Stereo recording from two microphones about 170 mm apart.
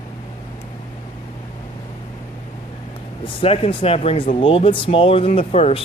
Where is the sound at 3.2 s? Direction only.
35° left (ahead or behind).